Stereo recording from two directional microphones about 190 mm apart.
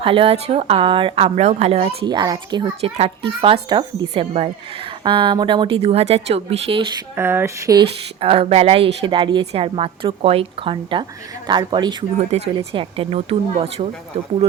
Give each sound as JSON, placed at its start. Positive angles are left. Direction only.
{"t": 0.0, "sound": "speech", "side_deg": -30}
{"t": 7.2, "sound": "speech", "side_deg": -10}
{"t": 8.2, "sound": "speech", "side_deg": -30}